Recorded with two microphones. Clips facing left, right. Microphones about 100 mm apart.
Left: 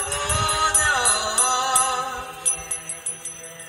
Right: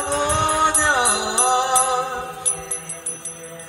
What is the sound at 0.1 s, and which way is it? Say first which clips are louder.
Music: right 6 dB; 20° right (ahead or behind).